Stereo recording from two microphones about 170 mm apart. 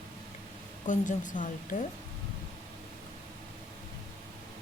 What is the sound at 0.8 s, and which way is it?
Speech, 50° left (ahead or behind).